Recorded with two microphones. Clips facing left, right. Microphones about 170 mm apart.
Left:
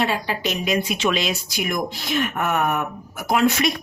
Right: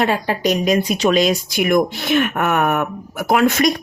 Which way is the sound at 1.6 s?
65° right (ahead or behind).